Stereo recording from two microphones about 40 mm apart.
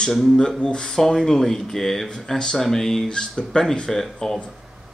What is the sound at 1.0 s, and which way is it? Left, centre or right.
Speech, centre.